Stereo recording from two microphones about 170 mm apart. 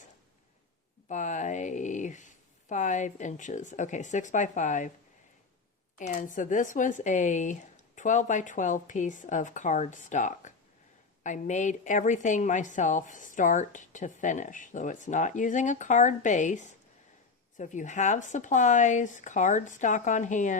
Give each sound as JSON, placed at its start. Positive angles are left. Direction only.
{"t": 1.0, "sound": "speech", "side_deg": 45}
{"t": 6.0, "sound": "a woman's voice", "side_deg": 50}